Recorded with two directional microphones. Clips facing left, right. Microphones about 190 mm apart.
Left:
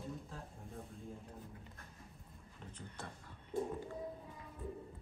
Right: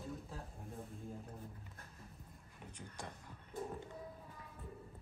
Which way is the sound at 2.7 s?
15° right (ahead or behind).